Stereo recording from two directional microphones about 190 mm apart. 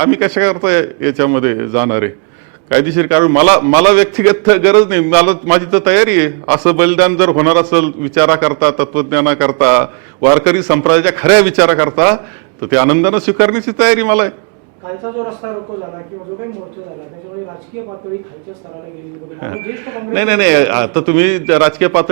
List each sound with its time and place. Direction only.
0.0 s a man's voice: 10° right (ahead or behind)
19.4 s a man's voice: 15° right (ahead or behind)